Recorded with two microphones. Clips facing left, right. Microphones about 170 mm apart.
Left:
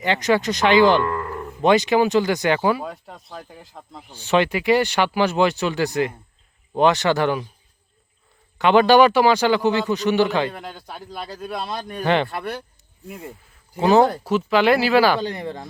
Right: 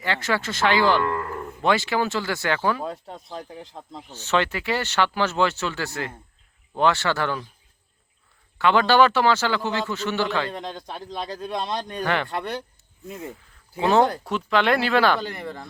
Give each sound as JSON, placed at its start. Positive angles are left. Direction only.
{"t": 0.0, "sound": "speech", "side_deg": 20}
{"t": 1.0, "sound": "cattle", "side_deg": 0}
{"t": 1.6, "sound": "speech", "side_deg": 20}
{"t": 3.1, "sound": "speech", "side_deg": 0}
{"t": 3.9, "sound": "speech", "side_deg": 10}
{"t": 8.5, "sound": "speech", "side_deg": 20}
{"t": 11.3, "sound": "speech", "side_deg": 5}
{"t": 12.0, "sound": "speech", "side_deg": 25}
{"t": 13.7, "sound": "speech", "side_deg": 0}
{"t": 15.3, "sound": "speech", "side_deg": 15}